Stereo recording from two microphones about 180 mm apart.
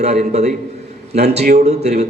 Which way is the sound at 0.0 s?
35° right (ahead or behind).